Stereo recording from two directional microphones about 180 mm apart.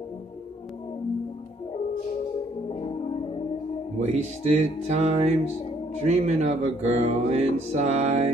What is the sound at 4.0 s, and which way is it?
Music, 40° right (ahead or behind).